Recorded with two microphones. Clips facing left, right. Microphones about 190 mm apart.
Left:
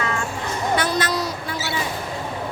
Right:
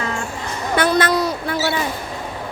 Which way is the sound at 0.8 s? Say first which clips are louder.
Right 11 dB; 60° right (ahead or behind).